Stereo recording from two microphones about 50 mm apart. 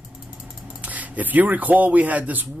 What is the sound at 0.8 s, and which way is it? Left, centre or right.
Speech, right.